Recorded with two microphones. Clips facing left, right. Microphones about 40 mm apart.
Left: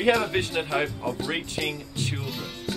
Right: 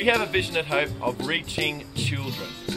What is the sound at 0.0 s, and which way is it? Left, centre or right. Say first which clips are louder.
Speech: even; centre.